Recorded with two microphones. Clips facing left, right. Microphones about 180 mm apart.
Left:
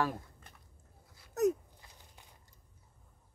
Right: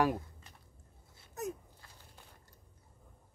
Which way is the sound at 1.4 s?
75° left (ahead or behind).